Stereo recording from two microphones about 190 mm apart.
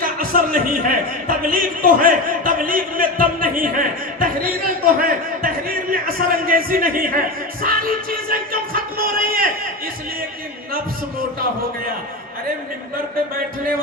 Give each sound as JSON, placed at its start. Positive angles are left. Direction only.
{"t": 0.0, "sound": "a man's voice", "side_deg": -50}
{"t": 7.6, "sound": "music", "side_deg": -50}